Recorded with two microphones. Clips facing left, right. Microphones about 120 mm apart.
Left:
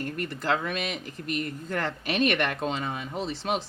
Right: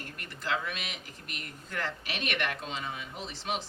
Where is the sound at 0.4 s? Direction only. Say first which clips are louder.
Left 5 dB; 45° left (ahead or behind).